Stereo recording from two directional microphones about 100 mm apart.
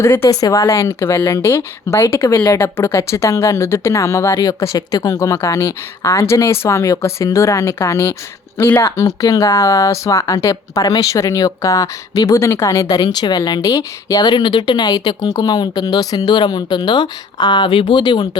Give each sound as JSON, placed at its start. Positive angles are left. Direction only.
{"t": 0.0, "sound": "speech", "side_deg": 25}